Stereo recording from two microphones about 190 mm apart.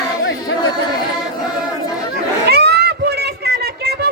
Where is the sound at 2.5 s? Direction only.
60° right (ahead or behind).